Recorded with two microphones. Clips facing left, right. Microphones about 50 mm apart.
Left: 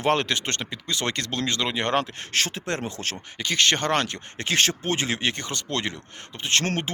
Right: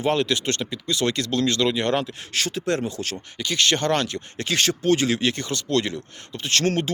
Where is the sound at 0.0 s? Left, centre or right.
Left.